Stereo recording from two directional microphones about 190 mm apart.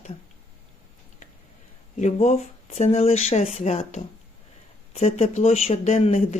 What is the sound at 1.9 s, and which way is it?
Speech, 40° left (ahead or behind).